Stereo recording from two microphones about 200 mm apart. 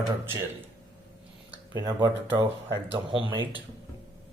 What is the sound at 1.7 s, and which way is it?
Speech, 20° right (ahead or behind).